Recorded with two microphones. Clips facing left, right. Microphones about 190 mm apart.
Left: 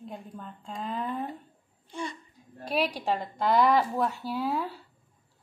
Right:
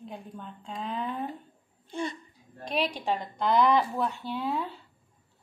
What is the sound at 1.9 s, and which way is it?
Laughter, 25° right (ahead or behind).